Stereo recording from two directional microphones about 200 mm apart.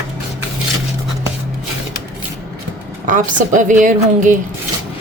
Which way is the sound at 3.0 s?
40° right (ahead or behind).